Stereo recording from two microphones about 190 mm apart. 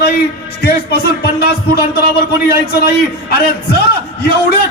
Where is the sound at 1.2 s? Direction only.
55° left (ahead or behind).